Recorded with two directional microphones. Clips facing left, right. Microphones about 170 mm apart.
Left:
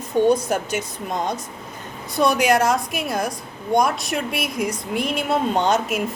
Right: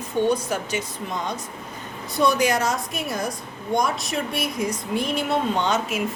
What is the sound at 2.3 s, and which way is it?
Speech, 70° left (ahead or behind).